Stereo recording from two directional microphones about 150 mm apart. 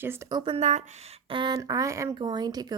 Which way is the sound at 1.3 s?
30° right (ahead or behind).